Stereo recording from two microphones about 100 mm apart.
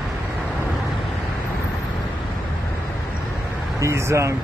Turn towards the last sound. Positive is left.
turn(degrees=-30)  # may be behind; listen again after turning